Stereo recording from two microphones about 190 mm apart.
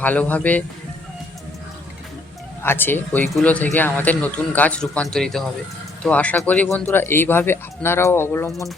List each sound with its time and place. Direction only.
0.0 s speech: 10° left (ahead or behind)
2.6 s speech: 10° left (ahead or behind)